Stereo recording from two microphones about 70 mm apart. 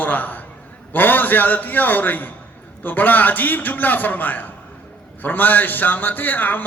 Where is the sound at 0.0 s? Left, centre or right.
Left.